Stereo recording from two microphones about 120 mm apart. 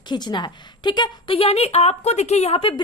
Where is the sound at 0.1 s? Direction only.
40° left (ahead or behind).